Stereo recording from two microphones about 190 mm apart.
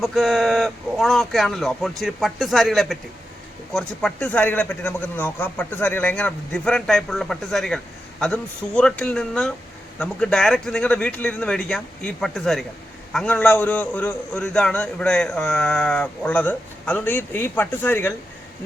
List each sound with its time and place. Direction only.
0.0 s a man's voice: centre (ahead or behind)